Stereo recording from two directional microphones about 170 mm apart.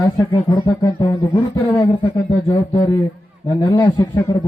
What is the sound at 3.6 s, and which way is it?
Speech, 20° left (ahead or behind).